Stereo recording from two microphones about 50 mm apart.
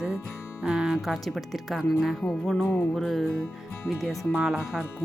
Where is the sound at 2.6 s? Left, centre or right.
Left.